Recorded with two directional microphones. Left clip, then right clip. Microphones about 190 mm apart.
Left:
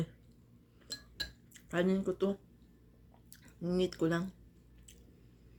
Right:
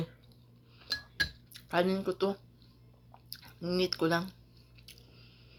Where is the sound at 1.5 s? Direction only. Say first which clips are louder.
Right 2 dB; 15° left (ahead or behind).